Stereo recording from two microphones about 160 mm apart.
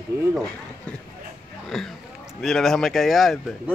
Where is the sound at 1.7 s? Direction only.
Centre (ahead or behind).